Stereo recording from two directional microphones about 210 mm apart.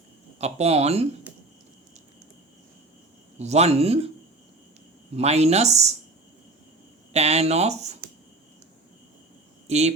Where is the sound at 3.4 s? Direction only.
30° right (ahead or behind).